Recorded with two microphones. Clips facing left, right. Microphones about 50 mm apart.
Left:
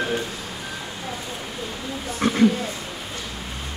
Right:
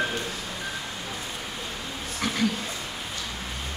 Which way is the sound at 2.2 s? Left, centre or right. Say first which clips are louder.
Left 8 dB; left.